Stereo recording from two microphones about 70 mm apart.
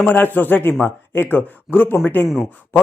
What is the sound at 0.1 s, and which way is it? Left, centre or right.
Speech, left.